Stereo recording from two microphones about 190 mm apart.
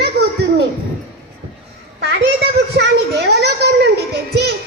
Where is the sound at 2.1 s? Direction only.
65° right (ahead or behind).